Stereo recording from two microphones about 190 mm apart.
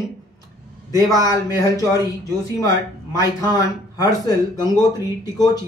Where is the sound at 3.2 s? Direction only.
15° left (ahead or behind).